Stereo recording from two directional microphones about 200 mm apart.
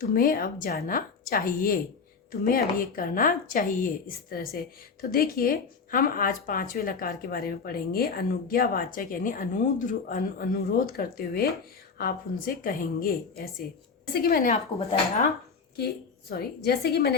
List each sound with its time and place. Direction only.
0.1 s speech: 45° left (ahead or behind)
12.6 s speech: 45° left (ahead or behind)
14.5 s speech: 30° left (ahead or behind)
16.3 s speech: 50° left (ahead or behind)